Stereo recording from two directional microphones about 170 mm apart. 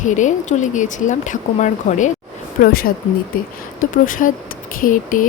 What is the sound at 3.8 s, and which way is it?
A woman's voice, 55° left (ahead or behind).